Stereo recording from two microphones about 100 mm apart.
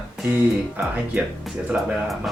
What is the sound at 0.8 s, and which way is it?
Speech, 20° right (ahead or behind).